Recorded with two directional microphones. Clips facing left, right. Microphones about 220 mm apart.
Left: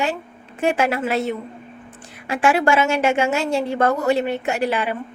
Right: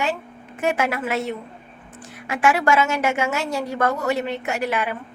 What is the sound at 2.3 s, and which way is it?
A woman's voice, 30° left (ahead or behind).